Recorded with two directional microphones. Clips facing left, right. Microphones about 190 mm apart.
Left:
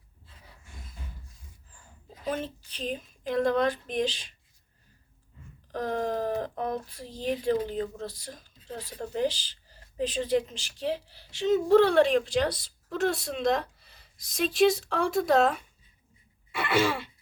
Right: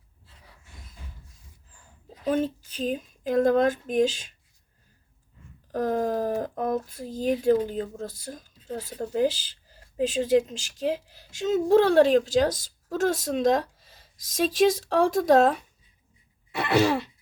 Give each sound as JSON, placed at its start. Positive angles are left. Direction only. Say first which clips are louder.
{"t": 2.2, "sound": "speech", "louder": "right 7 dB", "side_deg": -45}
{"t": 5.7, "sound": "speech", "louder": "right 4 dB", "side_deg": -45}
{"t": 16.5, "sound": "throat clearing", "louder": "right 4 dB", "side_deg": -40}